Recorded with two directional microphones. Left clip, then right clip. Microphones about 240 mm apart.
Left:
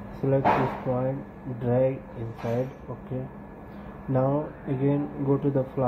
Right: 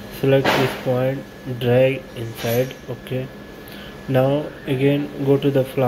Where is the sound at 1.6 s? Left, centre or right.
Centre.